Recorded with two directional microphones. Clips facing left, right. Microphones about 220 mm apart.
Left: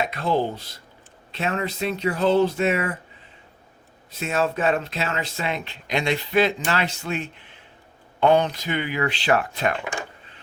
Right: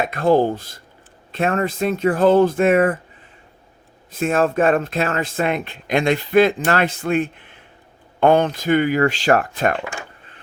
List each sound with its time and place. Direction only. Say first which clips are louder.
0.0 s speech: right 7 dB; 50° right (ahead or behind)
4.1 s speech: right 6 dB; 50° right (ahead or behind)